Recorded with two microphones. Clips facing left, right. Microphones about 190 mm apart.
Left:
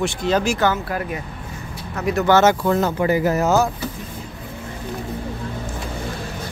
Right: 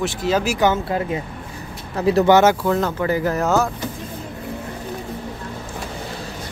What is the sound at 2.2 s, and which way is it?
Speech, 15° right (ahead or behind).